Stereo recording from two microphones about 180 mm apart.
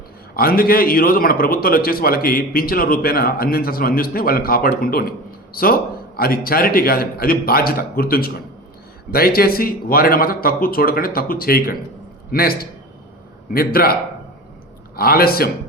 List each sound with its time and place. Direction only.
0.3 s a man's voice: 55° left (ahead or behind)
14.9 s a man's voice: 55° left (ahead or behind)